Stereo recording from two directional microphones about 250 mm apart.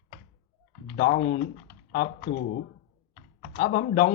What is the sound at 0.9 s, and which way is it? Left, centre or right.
Speech, left.